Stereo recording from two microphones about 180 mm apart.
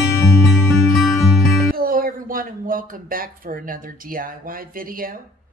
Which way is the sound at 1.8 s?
55° right (ahead or behind).